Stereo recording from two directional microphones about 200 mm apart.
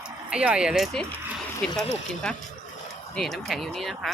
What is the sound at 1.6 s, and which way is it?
Speech, 5° left (ahead or behind).